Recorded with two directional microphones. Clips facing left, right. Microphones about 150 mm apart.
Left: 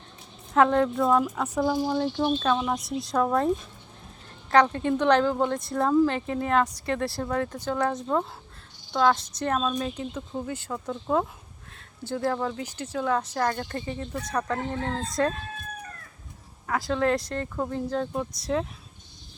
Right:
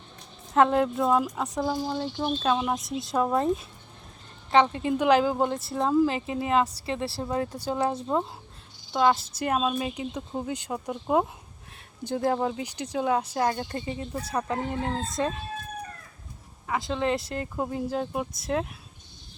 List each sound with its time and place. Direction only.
0.5 s speech: 5° right (ahead or behind)
6.8 s speech: 30° right (ahead or behind)
7.5 s speech: 10° right (ahead or behind)
7.8 s speech: 25° right (ahead or behind)
9.0 s speech: 5° right (ahead or behind)
16.6 s speech: centre (ahead or behind)